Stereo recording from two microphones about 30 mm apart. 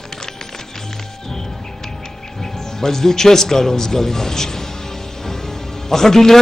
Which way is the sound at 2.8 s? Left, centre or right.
Centre.